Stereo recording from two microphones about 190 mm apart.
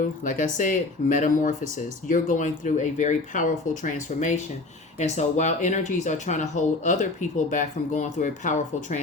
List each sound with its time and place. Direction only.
0.3 s speech: 40° left (ahead or behind)